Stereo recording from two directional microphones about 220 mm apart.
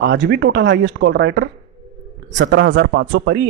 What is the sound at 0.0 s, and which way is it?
Speech, 50° right (ahead or behind).